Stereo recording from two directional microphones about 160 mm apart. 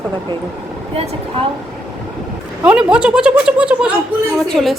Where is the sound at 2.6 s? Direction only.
5° right (ahead or behind).